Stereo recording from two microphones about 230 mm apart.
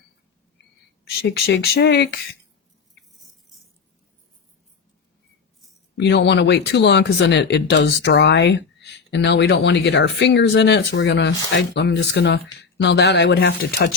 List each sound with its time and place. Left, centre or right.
1.3 s speech: left
6.0 s speech: left